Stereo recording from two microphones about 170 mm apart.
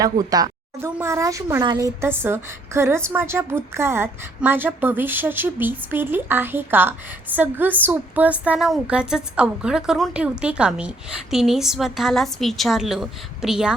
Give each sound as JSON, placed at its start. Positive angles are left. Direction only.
{"t": 0.0, "sound": "a woman's voice", "side_deg": -20}